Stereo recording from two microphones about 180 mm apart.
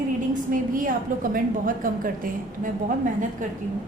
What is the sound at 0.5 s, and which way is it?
A woman's voice, 50° right (ahead or behind).